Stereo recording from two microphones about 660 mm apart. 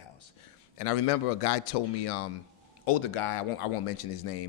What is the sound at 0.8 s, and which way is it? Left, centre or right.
Speech, left.